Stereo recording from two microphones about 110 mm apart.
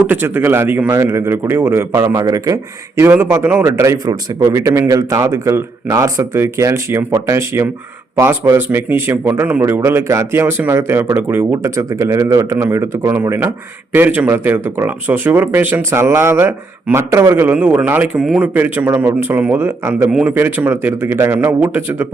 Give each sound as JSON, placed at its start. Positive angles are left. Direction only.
{"t": 0.1, "sound": "a man's voice", "side_deg": -20}
{"t": 20.1, "sound": "speech", "side_deg": -5}
{"t": 20.3, "sound": "a man's voice", "side_deg": -20}